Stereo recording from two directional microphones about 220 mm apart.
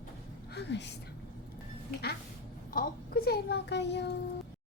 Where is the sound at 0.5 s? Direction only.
50° left (ahead or behind).